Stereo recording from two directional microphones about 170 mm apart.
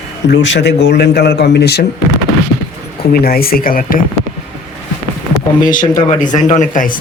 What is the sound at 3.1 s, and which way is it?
Speech, 60° left (ahead or behind).